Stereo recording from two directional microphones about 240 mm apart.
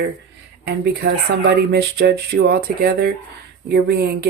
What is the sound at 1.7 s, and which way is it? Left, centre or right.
Speech, right.